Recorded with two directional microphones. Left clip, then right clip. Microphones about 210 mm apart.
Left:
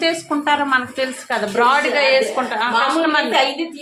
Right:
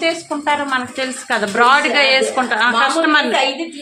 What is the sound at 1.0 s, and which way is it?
A woman's voice, 20° right (ahead or behind).